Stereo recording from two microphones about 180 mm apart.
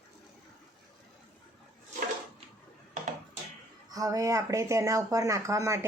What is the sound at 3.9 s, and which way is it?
Speech, 20° right (ahead or behind).